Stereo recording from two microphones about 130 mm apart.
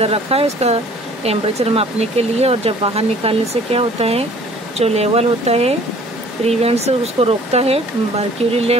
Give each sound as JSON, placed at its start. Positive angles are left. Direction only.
{"t": 0.0, "sound": "speech", "side_deg": -50}